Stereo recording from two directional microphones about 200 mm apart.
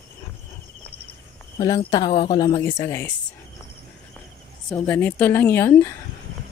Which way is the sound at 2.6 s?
15° left (ahead or behind).